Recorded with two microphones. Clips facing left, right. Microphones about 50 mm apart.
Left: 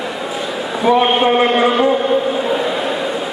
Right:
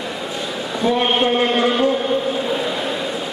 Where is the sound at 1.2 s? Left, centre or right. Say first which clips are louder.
Left 4 dB; centre.